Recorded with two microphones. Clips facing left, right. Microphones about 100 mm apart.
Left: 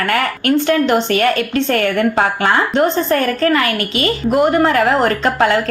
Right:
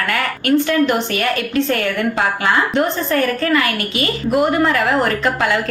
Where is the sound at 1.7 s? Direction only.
45° left (ahead or behind).